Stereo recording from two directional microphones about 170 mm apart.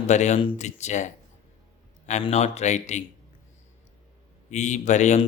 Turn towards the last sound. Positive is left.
turn(degrees=45)  # may be behind; listen again after turning